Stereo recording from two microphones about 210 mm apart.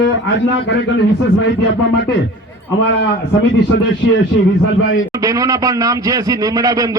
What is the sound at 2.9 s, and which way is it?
A man's voice, 60° left (ahead or behind).